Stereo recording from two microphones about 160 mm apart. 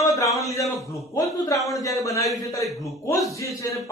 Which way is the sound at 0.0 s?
20° left (ahead or behind).